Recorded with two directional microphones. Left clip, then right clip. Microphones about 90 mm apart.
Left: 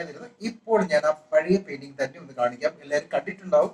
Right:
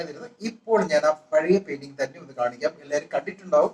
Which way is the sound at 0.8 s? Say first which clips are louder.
Right 1 dB; 35° right (ahead or behind).